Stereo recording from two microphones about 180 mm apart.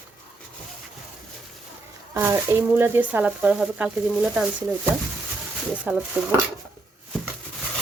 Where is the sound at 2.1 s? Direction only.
15° right (ahead or behind).